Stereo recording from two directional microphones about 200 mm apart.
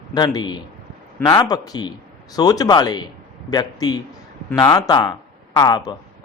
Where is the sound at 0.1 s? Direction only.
20° left (ahead or behind).